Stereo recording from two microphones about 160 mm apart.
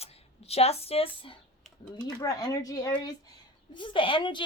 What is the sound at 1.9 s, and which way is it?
A woman's voice, 25° left (ahead or behind).